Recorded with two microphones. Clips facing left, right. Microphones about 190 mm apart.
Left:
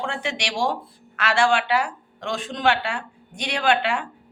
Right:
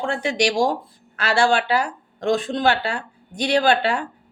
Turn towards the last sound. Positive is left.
turn(degrees=-40)  # may be behind; listen again after turning